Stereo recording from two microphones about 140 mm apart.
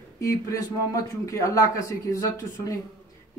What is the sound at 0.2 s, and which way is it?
Speech, 25° left (ahead or behind).